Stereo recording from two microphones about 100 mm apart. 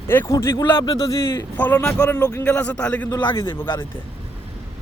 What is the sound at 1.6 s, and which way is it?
A man's voice, 15° left (ahead or behind).